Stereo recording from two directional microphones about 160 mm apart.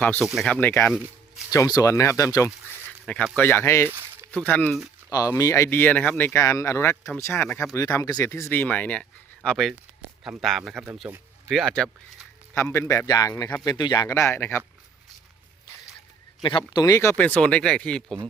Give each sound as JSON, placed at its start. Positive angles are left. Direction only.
{"t": 0.0, "sound": "speech", "side_deg": 10}
{"t": 3.8, "sound": "a sound", "side_deg": -10}
{"t": 4.3, "sound": "speech", "side_deg": 10}
{"t": 4.7, "sound": "a sound", "side_deg": -5}
{"t": 5.1, "sound": "speech", "side_deg": 20}
{"t": 12.5, "sound": "speech", "side_deg": 15}
{"t": 16.4, "sound": "speech", "side_deg": 30}